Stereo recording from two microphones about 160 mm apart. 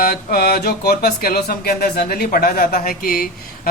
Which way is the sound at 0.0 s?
70° left (ahead or behind).